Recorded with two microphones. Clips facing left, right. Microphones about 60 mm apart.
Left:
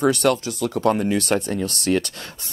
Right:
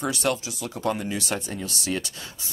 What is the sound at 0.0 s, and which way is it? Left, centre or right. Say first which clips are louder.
Speech: left 7 dB; left.